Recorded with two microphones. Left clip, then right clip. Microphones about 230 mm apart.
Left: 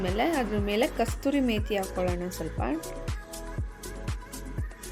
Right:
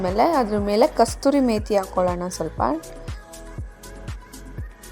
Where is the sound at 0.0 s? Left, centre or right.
Right.